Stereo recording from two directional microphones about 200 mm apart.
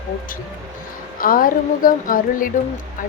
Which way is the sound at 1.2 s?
45° left (ahead or behind).